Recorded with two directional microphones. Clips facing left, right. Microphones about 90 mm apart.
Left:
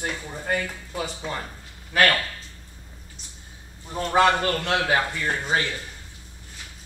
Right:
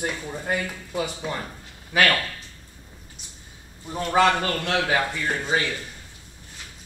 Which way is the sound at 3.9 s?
20° left (ahead or behind).